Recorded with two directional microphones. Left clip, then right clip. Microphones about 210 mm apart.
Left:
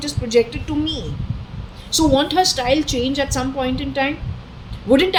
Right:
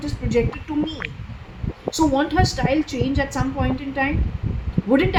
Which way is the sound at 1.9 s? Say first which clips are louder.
Left 3 dB; 25° left (ahead or behind).